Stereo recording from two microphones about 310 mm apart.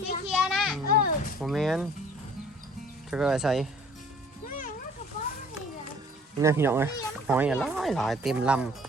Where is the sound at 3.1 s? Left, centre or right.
Centre.